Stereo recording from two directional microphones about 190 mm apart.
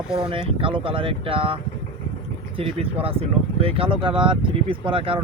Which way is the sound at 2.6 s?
30° right (ahead or behind).